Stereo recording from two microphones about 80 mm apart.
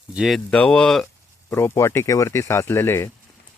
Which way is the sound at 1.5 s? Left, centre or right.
Left.